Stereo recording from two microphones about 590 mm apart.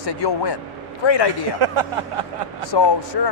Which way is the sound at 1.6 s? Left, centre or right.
Right.